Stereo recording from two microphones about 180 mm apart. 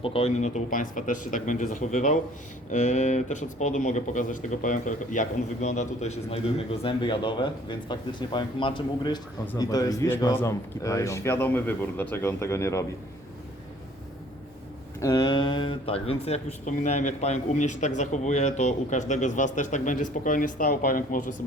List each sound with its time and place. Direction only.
0.0 s a man's voice: 35° left (ahead or behind); by 12.8 s 15° left (ahead or behind)
15.0 s speech: 20° left (ahead or behind); by 21.3 s 50° left (ahead or behind)